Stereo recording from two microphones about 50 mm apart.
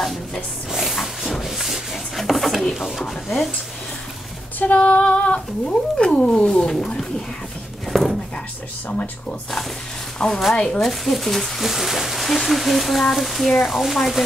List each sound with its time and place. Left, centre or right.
0.0 s music: centre
0.7 s wood: centre
4.6 s cat: left; by 7.1 s centre
7.9 s a sound: centre
8.8 s speech: left
10.1 s speech: centre
10.8 s speech: centre